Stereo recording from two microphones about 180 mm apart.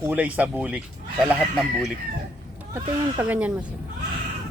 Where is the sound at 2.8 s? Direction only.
10° right (ahead or behind).